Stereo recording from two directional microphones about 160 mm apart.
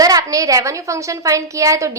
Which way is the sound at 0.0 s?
20° right (ahead or behind).